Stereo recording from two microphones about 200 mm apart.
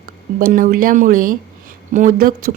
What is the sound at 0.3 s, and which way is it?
A woman's voice, 45° right (ahead or behind).